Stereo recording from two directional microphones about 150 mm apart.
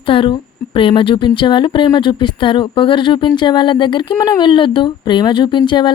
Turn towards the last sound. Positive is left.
turn(degrees=30)  # may be behind; listen again after turning